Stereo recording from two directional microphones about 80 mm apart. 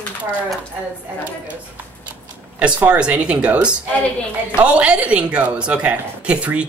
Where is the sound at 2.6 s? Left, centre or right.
Centre.